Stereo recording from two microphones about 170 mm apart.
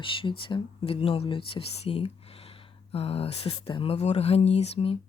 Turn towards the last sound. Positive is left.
turn(degrees=35)  # may be behind; listen again after turning